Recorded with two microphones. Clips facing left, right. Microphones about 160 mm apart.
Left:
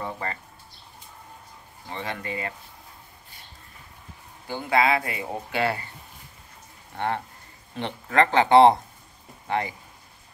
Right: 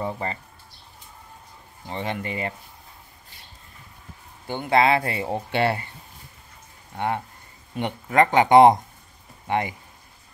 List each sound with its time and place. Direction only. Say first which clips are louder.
0.0 s speech: right 3 dB; 25° right (ahead or behind)
1.9 s speech: right 3 dB; 25° right (ahead or behind)
4.5 s speech: right 3 dB; 25° right (ahead or behind)
7.7 s speech: right 2 dB; 15° right (ahead or behind)